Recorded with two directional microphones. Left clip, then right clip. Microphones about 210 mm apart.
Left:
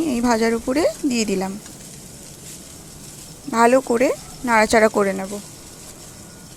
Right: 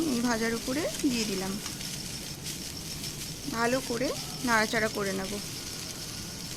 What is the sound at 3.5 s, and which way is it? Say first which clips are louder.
Speech: left 14 dB; 35° left (ahead or behind).